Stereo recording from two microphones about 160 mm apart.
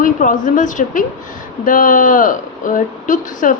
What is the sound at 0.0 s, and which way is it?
A woman's voice, 55° left (ahead or behind).